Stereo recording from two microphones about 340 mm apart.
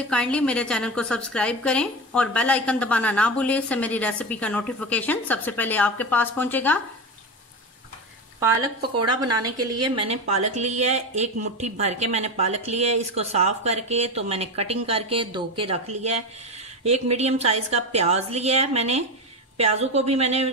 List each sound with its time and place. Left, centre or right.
0.1 s a woman's voice: centre
9.0 s a woman's voice: centre